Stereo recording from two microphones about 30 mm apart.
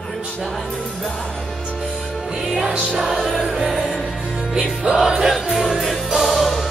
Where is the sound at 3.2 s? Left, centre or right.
Centre.